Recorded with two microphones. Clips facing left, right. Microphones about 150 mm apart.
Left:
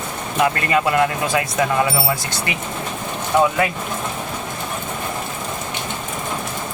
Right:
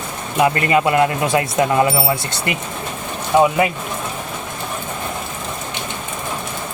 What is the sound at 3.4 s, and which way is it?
Speech, 20° right (ahead or behind).